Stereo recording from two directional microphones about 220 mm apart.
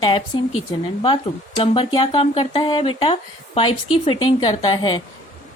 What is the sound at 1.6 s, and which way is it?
Speech, 25° left (ahead or behind).